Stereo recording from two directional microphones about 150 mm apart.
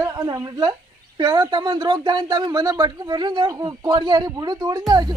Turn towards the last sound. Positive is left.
turn(degrees=-25)  # may be behind; listen again after turning